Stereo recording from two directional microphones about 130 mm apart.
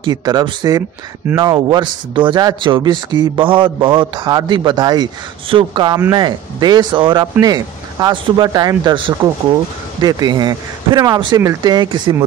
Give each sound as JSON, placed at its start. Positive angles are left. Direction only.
{"t": 0.0, "sound": "speech", "side_deg": -30}